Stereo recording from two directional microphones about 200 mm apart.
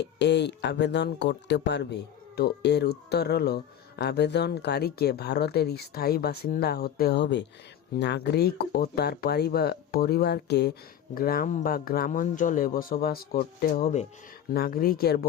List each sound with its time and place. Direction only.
0.0 s speech: 60° left (ahead or behind)